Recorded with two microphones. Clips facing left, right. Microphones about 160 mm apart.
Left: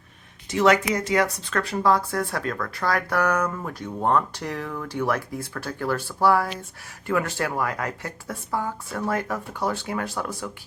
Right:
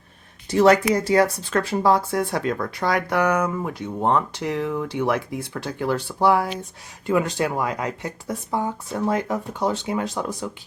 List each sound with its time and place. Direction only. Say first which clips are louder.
0.5 s speech: right 4 dB; 35° right (ahead or behind); by 10.5 s 20° right (ahead or behind)